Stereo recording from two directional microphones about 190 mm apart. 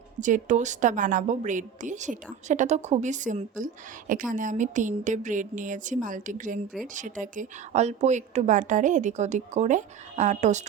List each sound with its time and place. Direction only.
0.2 s a woman's voice: 40° right (ahead or behind)